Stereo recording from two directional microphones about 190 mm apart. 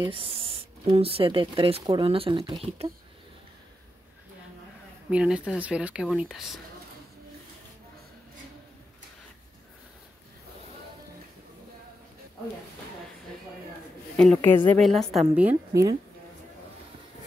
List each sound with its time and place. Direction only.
0.0 s speech: 30° right (ahead or behind)
5.1 s a woman's voice: 5° right (ahead or behind)
14.1 s a woman's voice: 5° left (ahead or behind); by 16.0 s 15° right (ahead or behind)